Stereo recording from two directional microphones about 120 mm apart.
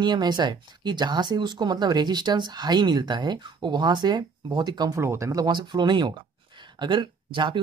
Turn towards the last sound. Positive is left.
turn(degrees=-45)  # may be behind; listen again after turning